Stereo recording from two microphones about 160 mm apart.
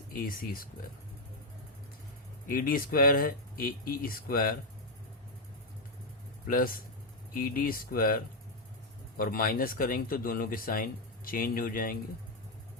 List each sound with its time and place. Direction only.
0.1 s speech: 65° left (ahead or behind)
2.5 s speech: 60° left (ahead or behind)
6.5 s speech: 65° left (ahead or behind)